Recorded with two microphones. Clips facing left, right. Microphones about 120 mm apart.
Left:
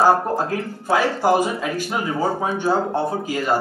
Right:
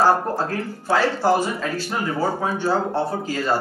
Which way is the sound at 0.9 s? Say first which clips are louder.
Left 1 dB; 15° left (ahead or behind).